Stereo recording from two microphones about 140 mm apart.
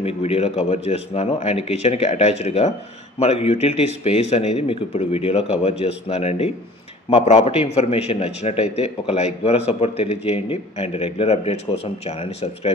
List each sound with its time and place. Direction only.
0.0 s a man's voice: 45° left (ahead or behind)